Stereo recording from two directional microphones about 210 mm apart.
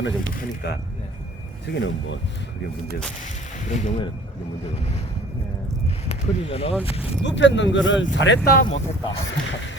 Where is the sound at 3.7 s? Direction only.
35° left (ahead or behind).